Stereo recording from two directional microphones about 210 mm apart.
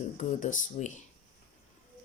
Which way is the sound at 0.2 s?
35° left (ahead or behind).